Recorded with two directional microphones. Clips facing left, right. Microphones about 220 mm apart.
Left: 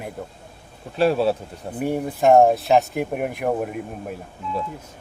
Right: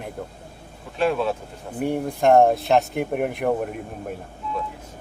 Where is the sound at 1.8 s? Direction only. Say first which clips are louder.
Left 1 dB; 5° left (ahead or behind).